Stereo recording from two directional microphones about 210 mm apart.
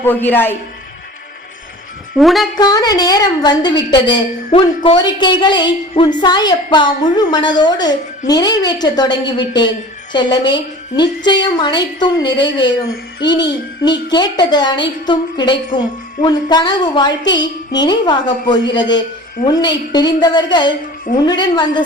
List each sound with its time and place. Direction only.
0.0 s a man's voice: 10° left (ahead or behind)
2.1 s speech: centre (ahead or behind)
2.6 s a woman's voice: 20° left (ahead or behind)